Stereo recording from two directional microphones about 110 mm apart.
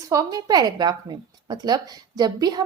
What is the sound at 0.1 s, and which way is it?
Speech, 35° right (ahead or behind).